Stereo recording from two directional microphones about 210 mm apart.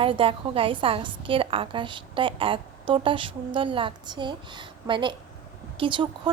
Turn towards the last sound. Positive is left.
turn(degrees=-25)  # may be behind; listen again after turning